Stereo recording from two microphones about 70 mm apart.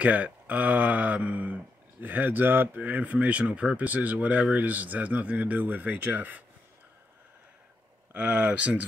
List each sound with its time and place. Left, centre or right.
0.0 s speech: right
8.1 s speech: right